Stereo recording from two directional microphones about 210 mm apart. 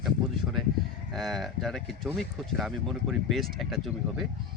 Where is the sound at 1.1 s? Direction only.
Centre (ahead or behind).